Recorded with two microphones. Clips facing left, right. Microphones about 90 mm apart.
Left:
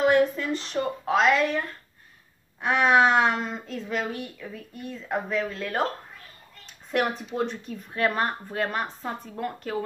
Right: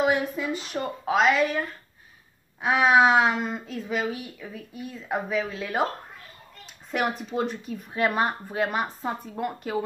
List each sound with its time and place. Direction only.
0.0 s speech: 10° right (ahead or behind)